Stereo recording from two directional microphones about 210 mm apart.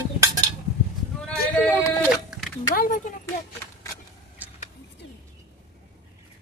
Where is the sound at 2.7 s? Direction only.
40° left (ahead or behind).